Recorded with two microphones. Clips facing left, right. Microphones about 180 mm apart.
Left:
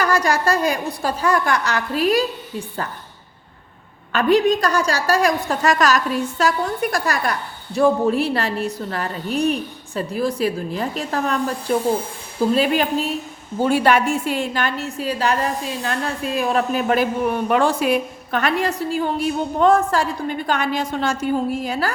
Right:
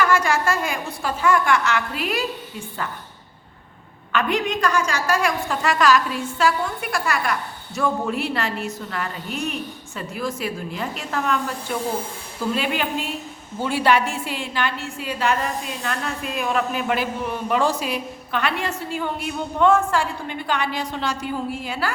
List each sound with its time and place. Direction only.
0.0 s a woman's voice: 35° left (ahead or behind)
4.1 s a woman's voice: 35° left (ahead or behind)